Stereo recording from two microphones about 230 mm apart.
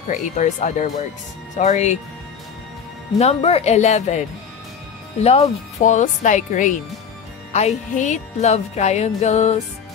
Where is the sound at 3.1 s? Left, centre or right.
Left.